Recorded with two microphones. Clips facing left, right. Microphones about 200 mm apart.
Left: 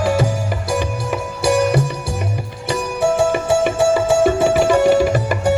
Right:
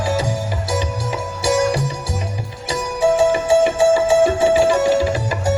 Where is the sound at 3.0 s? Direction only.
60° left (ahead or behind).